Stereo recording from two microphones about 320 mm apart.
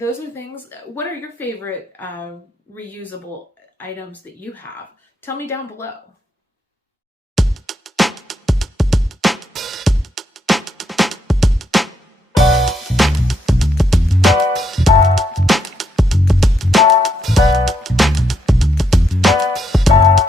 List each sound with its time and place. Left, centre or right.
0.7 s a woman's voice: centre
7.3 s music: centre